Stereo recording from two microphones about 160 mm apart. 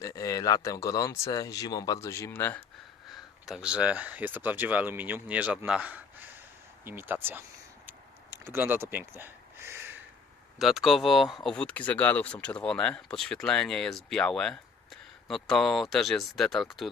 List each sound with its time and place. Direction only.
0.0 s speech: 20° left (ahead or behind)
3.1 s speech: centre (ahead or behind)
7.9 s gasp: 15° right (ahead or behind)
10.6 s speech: centre (ahead or behind)